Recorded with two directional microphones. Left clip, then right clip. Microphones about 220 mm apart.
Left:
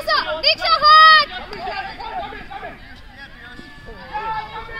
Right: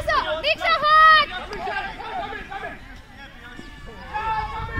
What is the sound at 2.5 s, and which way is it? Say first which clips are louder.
Chatter: left 1 dB; 50° right (ahead or behind).